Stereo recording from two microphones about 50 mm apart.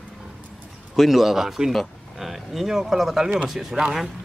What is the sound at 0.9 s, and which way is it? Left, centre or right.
Speech, centre.